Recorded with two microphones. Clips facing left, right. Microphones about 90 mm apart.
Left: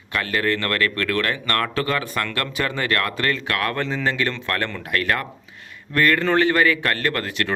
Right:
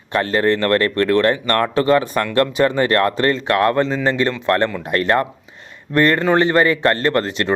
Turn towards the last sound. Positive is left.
turn(degrees=-25)  # may be behind; listen again after turning